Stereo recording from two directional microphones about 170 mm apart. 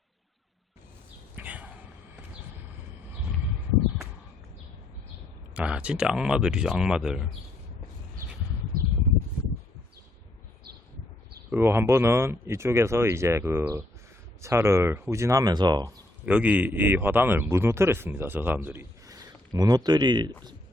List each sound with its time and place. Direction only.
1.4 s a sound: 10° right (ahead or behind)
5.5 s speech: 5° right (ahead or behind)
11.6 s a man's voice: 15° right (ahead or behind)
16.2 s a man's voice: 5° right (ahead or behind); by 20.3 s 25° right (ahead or behind)